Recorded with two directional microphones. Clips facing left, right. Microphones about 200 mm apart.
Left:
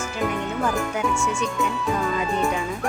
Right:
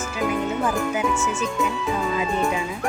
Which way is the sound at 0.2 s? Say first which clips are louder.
Right 2 dB; centre (ahead or behind).